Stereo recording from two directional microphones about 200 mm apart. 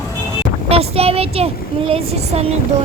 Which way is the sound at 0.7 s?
30° right (ahead or behind).